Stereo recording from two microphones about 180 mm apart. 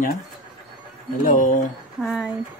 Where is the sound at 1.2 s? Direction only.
45° left (ahead or behind).